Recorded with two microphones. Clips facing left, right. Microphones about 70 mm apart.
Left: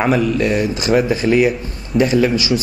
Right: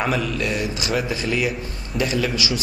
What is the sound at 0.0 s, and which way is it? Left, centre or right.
A man's voice, left.